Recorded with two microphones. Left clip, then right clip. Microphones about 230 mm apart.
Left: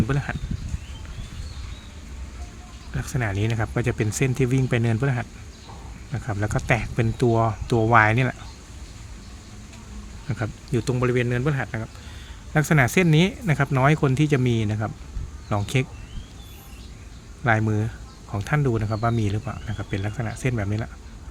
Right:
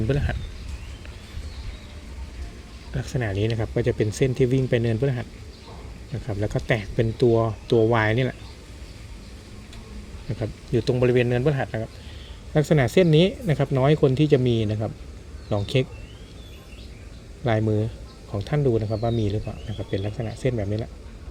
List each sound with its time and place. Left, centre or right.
2.9 s speech: centre
6.2 s speech: centre
10.4 s speech: centre
17.4 s speech: centre